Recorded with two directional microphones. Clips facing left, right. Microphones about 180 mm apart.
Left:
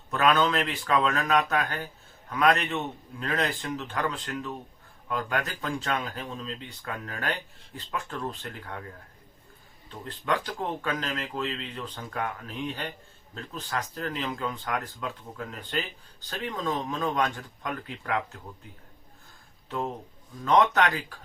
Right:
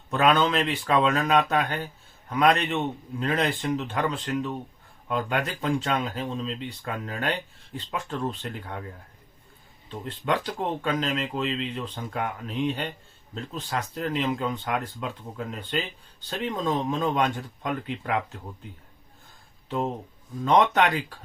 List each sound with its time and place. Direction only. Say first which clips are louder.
0.1 s speech: right 2 dB; 25° right (ahead or behind)
9.9 s speech: right 2 dB; 20° right (ahead or behind)
20.5 s speech: right 2 dB; 20° right (ahead or behind)